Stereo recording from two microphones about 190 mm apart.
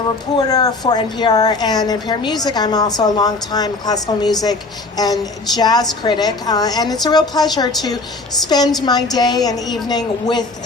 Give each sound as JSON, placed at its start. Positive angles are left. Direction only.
{"t": 0.3, "sound": "speech", "side_deg": 20}